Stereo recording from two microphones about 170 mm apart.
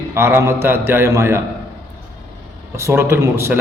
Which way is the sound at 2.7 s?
15° right (ahead or behind).